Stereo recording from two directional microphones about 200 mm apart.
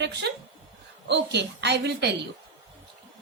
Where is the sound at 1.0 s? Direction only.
60° right (ahead or behind).